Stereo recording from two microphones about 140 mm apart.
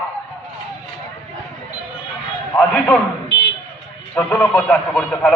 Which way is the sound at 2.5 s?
10° left (ahead or behind).